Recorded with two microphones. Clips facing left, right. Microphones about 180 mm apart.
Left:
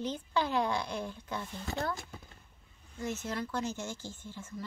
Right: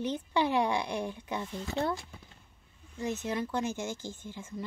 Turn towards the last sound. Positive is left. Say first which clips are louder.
# right 3 dB
turn(degrees=-15)  # may be behind; listen again after turning